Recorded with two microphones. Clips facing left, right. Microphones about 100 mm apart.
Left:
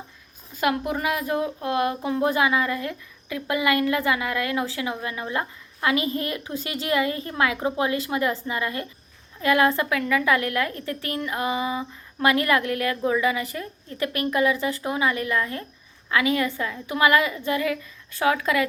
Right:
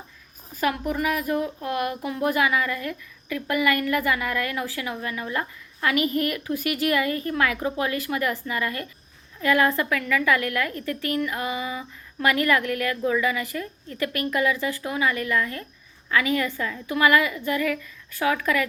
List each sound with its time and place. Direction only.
1.0 s a woman's voice: 25° left (ahead or behind)